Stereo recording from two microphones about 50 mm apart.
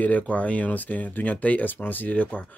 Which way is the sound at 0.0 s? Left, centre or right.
Left.